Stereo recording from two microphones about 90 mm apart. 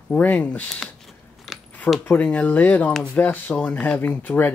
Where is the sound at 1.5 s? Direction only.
Centre (ahead or behind).